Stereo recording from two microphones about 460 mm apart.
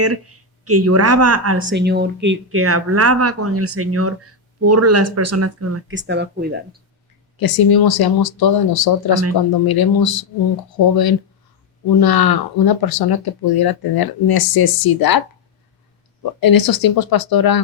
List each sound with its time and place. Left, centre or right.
0.0 s speech: right
7.3 s speech: left
16.4 s speech: left